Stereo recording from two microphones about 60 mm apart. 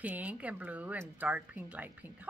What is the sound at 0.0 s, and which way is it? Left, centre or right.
A woman's voice, right.